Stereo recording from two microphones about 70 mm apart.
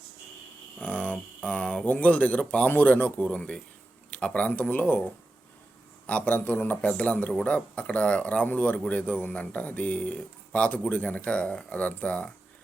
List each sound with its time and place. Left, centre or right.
0.8 s speech: left